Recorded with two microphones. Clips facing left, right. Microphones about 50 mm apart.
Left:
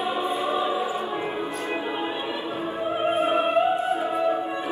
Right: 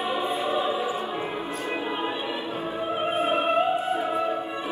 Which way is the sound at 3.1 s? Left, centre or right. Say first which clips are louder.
Left 2 dB; left.